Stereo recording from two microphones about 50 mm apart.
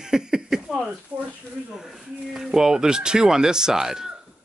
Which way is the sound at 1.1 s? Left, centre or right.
Right.